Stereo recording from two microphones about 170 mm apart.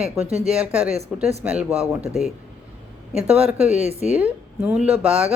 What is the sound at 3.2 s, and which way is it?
Speech, 35° right (ahead or behind).